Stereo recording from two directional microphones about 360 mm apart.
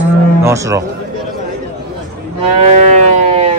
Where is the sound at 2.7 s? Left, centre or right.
Centre.